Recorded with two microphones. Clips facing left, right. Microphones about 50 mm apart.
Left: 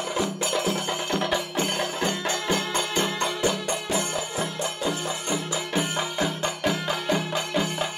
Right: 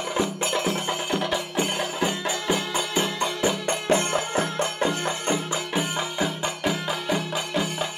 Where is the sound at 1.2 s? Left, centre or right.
Centre.